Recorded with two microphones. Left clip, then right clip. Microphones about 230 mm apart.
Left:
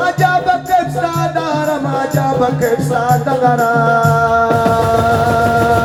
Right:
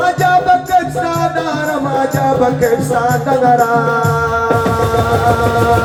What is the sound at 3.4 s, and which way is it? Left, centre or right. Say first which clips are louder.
Music: right 4 dB; left.